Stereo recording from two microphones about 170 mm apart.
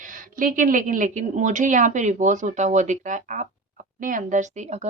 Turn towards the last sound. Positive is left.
turn(degrees=-40)  # may be behind; listen again after turning